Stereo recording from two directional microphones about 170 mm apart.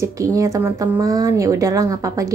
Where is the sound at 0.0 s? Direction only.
20° right (ahead or behind).